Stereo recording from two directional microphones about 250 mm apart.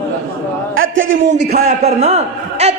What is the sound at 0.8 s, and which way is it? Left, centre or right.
Speech, right.